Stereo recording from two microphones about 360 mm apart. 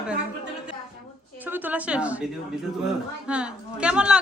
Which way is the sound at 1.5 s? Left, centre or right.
Centre.